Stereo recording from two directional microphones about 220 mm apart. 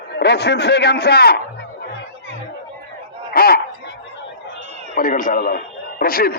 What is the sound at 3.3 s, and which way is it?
Speech, 45° left (ahead or behind).